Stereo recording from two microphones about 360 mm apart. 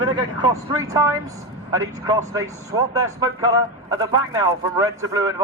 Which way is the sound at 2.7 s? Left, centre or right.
Centre.